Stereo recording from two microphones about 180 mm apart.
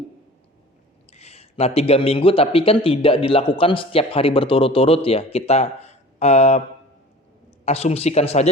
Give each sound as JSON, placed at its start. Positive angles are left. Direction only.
{"t": 1.1, "sound": "a man's voice", "side_deg": 35}
{"t": 7.6, "sound": "a man's voice", "side_deg": 35}